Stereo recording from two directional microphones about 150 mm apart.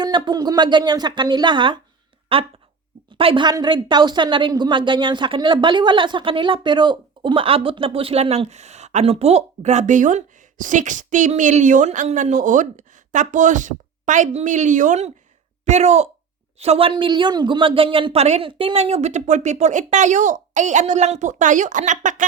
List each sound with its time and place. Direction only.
0.0 s a woman's voice: 30° right (ahead or behind); by 22.3 s 55° right (ahead or behind)